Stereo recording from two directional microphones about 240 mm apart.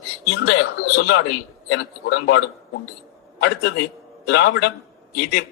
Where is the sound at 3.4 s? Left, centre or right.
Left.